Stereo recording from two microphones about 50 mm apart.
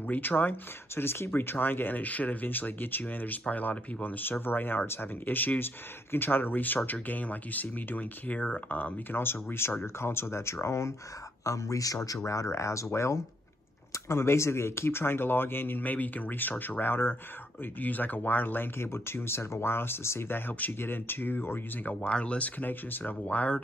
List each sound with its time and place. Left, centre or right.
0.0 s speech: left
0.9 s speech: left
9.2 s speech: left
11.4 s speech: left
17.7 s speech: left
22.1 s speech: left
22.6 s speech: left